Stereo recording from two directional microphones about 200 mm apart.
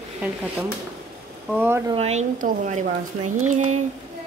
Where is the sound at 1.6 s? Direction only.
10° right (ahead or behind).